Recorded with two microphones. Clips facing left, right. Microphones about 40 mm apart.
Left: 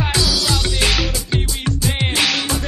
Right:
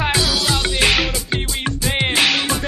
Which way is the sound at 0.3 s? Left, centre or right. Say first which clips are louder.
Right 1 dB; centre.